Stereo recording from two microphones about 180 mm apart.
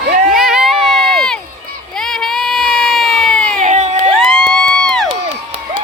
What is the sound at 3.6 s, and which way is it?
Crowd, 40° right (ahead or behind).